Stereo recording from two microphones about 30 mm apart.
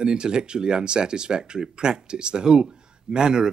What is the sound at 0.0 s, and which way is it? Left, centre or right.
Speech, right.